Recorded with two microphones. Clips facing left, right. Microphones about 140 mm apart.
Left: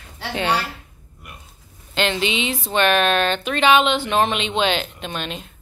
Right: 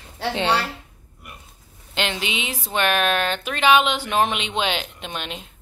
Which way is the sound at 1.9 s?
15° right (ahead or behind).